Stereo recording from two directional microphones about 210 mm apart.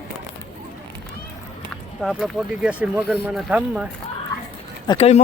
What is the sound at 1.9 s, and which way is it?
Speech, centre (ahead or behind).